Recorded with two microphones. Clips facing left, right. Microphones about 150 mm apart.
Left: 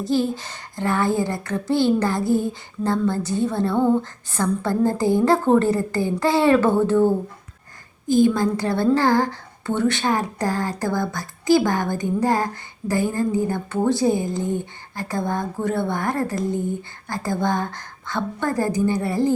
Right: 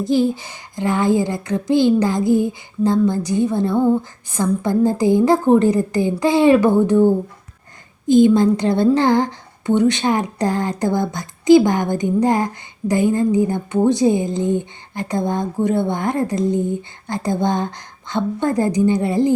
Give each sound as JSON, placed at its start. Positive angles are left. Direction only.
{"t": 0.0, "sound": "speech", "side_deg": -15}